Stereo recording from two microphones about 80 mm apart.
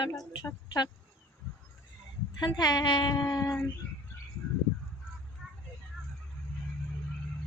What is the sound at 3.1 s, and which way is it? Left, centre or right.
Child singing, left.